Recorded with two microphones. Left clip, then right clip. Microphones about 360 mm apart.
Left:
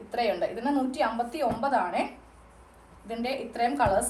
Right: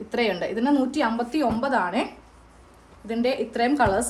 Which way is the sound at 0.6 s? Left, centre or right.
Right.